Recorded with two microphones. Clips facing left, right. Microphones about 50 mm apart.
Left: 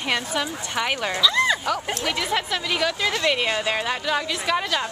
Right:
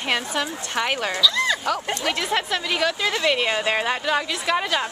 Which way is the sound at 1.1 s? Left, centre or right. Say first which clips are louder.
Left 4 dB; centre.